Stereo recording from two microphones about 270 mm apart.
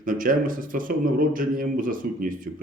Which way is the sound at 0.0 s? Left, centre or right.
Right.